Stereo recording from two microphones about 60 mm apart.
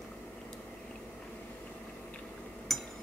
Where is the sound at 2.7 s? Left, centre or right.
Centre.